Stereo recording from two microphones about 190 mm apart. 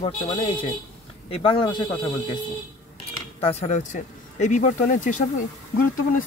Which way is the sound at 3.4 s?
35° left (ahead or behind).